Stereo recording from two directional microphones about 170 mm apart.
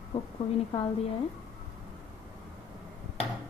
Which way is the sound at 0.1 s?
30° left (ahead or behind).